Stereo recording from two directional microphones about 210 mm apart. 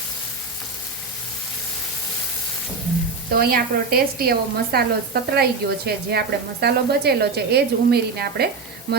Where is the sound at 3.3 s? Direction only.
45° right (ahead or behind).